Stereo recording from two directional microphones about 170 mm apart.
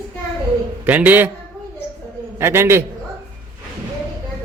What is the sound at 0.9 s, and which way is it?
Speech, 10° right (ahead or behind).